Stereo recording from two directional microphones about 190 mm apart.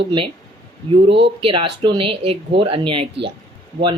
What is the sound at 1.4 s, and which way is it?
Speech, 25° right (ahead or behind).